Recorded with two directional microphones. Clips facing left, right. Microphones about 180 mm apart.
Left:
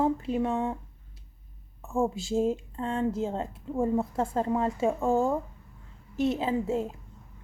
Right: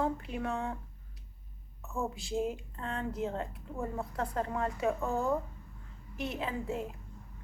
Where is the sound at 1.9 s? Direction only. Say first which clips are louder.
Left 8 dB; 30° left (ahead or behind).